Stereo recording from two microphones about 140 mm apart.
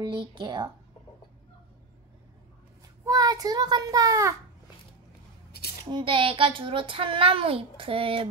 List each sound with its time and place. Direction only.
0.0 s a child's voice: 35° right (ahead or behind)
3.1 s a child's voice: 25° right (ahead or behind)
5.9 s a child's voice: 35° right (ahead or behind)